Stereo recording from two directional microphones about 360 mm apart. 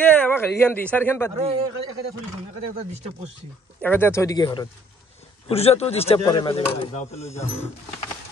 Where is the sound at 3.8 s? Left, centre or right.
Centre.